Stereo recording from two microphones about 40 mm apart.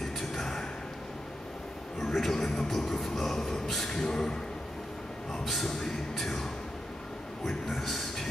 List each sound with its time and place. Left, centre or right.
0.0 s a sound: centre
2.0 s speech: centre
3.9 s speech: centre
5.4 s speech: centre
5.7 s speech: centre